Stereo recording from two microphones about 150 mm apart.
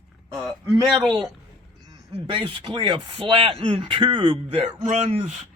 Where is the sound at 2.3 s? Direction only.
35° right (ahead or behind).